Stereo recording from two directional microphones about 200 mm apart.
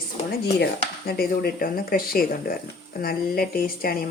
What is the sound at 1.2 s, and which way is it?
Speech, 50° left (ahead or behind).